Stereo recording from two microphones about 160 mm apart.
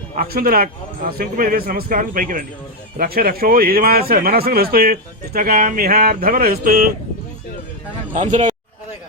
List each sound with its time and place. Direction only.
0.2 s speech: 65° right (ahead or behind)
3.0 s speech: 70° right (ahead or behind)
8.1 s speech: 50° right (ahead or behind)